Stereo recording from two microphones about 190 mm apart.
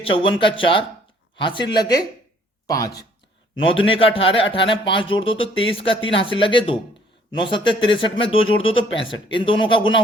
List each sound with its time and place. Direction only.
0.0 s speech: 25° left (ahead or behind)